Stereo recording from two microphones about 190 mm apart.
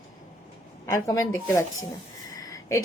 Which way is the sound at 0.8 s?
15° left (ahead or behind).